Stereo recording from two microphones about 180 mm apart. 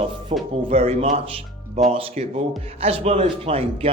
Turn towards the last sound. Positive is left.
turn(degrees=-35)  # may be behind; listen again after turning